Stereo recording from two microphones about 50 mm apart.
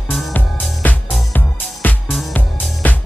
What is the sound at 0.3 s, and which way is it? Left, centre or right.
Music, left.